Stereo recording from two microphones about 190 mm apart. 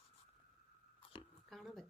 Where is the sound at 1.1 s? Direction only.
25° left (ahead or behind).